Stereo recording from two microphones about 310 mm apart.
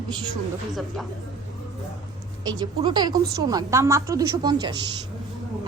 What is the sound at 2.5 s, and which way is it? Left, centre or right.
A woman's voice, centre.